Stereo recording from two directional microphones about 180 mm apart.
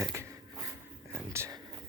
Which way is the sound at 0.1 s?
15° right (ahead or behind).